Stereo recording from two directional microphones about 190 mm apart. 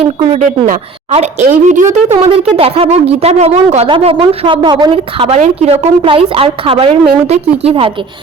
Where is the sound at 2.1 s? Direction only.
30° right (ahead or behind).